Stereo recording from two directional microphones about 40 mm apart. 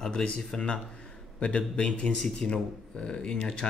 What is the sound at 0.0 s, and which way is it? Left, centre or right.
Speech, centre.